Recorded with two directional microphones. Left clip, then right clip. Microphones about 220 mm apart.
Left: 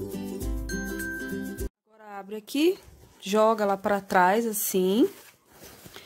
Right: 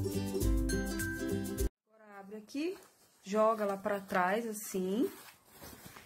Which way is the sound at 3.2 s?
45° left (ahead or behind).